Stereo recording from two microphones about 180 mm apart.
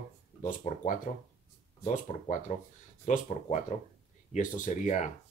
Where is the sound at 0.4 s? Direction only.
45° left (ahead or behind).